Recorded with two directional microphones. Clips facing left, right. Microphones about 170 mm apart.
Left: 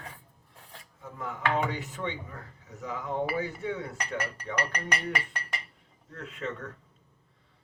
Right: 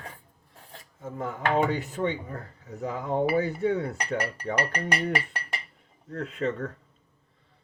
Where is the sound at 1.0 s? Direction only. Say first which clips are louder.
Right 3 dB; 45° right (ahead or behind).